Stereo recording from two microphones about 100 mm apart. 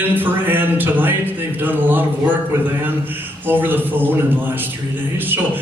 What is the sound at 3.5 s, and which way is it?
Speech, 20° right (ahead or behind).